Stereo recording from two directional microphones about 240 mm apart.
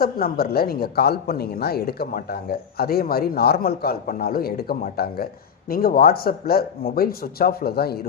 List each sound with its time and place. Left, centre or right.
0.0 s speech: left